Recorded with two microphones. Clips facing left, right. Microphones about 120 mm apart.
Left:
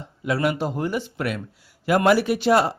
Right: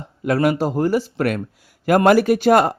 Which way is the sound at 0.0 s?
45° right (ahead or behind).